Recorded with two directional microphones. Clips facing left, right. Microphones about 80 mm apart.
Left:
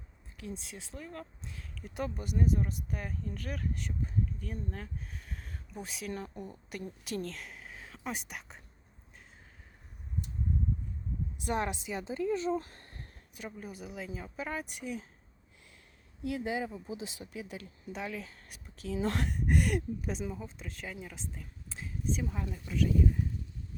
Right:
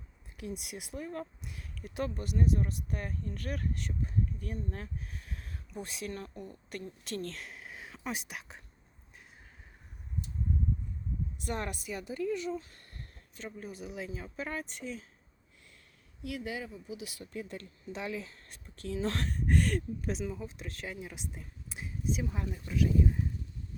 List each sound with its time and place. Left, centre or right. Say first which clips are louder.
0.3 s speech: right 2 dB; centre
2.0 s speech: right 1 dB; centre
6.1 s speech: left 2 dB; centre
7.0 s a woman's voice: left 1 dB; centre
11.3 s speech: left 5 dB; centre
12.7 s a sound: left 1 dB; left
13.3 s speech: even; centre
16.2 s speech: left 4 dB; left
17.2 s speech: right 1 dB; centre